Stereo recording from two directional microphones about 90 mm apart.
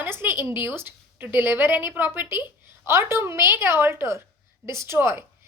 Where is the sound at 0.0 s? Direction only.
25° right (ahead or behind).